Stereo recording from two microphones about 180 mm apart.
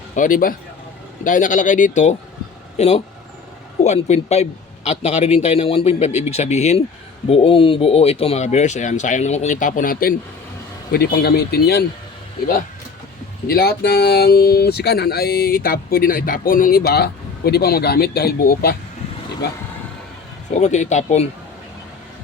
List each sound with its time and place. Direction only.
0.2 s a man's voice: 50° left (ahead or behind)
13.5 s speech: 60° left (ahead or behind)
20.5 s a man's voice: 40° left (ahead or behind)